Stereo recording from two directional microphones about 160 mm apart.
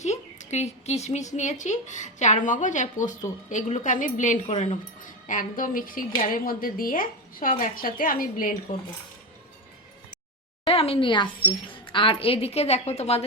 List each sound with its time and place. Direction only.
0.0 s a woman's voice: 45° left (ahead or behind)
4.4 s speech: 40° left (ahead or behind); by 8.5 s 60° left (ahead or behind)
10.6 s a woman's voice: 35° left (ahead or behind)